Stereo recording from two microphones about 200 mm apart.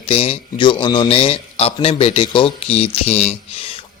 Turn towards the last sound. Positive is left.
turn(degrees=30)  # may be behind; listen again after turning